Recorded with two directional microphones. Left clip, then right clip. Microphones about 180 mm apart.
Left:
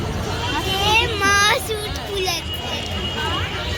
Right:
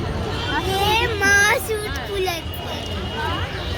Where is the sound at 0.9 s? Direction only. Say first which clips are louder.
Left 1 dB; 30° right (ahead or behind).